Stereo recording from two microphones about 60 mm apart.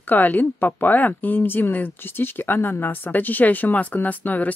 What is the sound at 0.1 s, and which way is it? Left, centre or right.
Speech, left.